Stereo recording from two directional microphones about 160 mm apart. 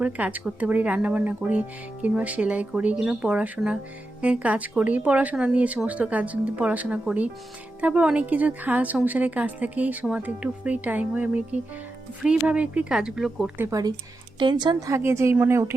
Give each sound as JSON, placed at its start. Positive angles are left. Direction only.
{"t": 0.0, "sound": "speech", "side_deg": -10}
{"t": 12.5, "sound": "a woman's voice", "side_deg": -10}
{"t": 13.7, "sound": "speech", "side_deg": -20}